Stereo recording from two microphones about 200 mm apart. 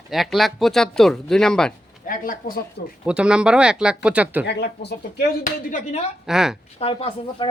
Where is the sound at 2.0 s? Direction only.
45° left (ahead or behind).